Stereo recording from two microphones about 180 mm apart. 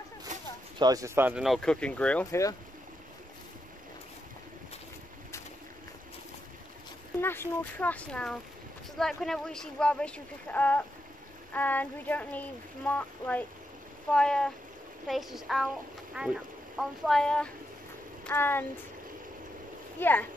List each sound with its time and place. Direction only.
0.3 s a sound: 40° right (ahead or behind)
0.7 s speech: 20° right (ahead or behind); by 2.4 s 5° left (ahead or behind)
7.2 s speech: 10° left (ahead or behind)
20.0 s speech: 10° left (ahead or behind)